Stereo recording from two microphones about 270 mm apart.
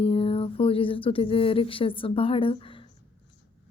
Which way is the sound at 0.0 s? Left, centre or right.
Left.